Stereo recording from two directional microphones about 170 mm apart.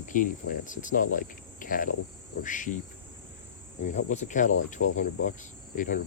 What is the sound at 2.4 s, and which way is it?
Insect, 50° left (ahead or behind).